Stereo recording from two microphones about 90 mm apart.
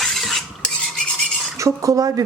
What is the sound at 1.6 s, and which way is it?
Cutlery, 40° right (ahead or behind).